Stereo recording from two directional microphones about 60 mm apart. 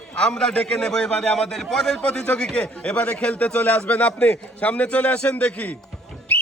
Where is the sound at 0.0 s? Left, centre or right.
Centre.